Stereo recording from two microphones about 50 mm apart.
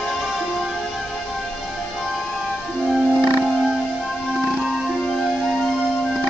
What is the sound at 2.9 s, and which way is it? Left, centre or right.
Music, centre.